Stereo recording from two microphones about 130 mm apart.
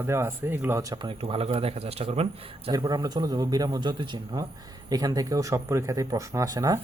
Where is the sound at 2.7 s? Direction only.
35° right (ahead or behind).